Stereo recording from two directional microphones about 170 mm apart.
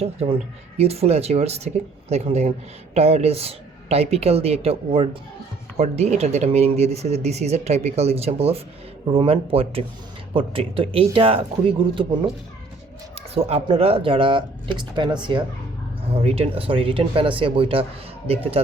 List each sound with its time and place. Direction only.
0.0 s speech: 35° right (ahead or behind)
13.3 s speech: 35° right (ahead or behind)